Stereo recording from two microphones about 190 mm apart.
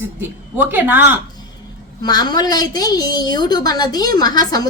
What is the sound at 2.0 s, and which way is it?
A woman's voice, 20° left (ahead or behind).